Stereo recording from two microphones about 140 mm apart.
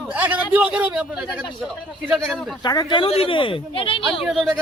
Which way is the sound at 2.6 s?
30° left (ahead or behind).